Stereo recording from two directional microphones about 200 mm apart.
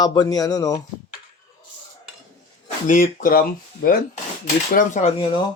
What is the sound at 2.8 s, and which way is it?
Speech, 40° left (ahead or behind).